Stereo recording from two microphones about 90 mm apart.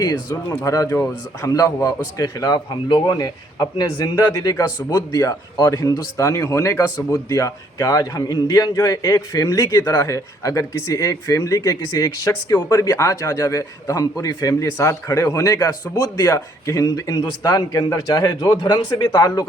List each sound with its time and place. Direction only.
0.0 s a man's voice: 45° left (ahead or behind)